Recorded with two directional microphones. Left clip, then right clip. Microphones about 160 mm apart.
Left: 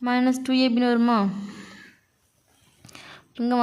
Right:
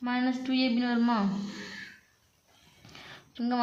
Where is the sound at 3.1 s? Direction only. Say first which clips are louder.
Left 7 dB; 40° left (ahead or behind).